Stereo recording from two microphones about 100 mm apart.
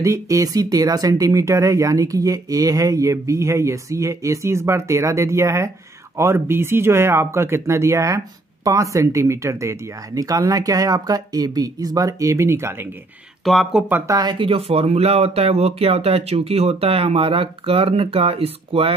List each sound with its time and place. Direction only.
0.0 s speech: 30° right (ahead or behind)
13.4 s speech: centre (ahead or behind)
14.0 s speech: 35° right (ahead or behind)
14.4 s speech: 75° right (ahead or behind)